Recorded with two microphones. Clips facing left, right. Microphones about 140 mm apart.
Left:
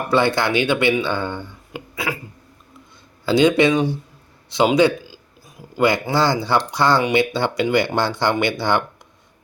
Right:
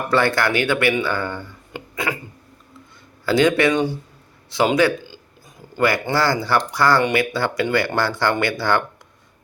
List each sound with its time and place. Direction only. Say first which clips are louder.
0.1 s speech: left 1 dB; 15° left (ahead or behind)
1.7 s a sound: right 1 dB; 5° left (ahead or behind)
3.2 s speech: left 2 dB; 20° left (ahead or behind)
6.1 s speech: left 1 dB; 20° left (ahead or behind)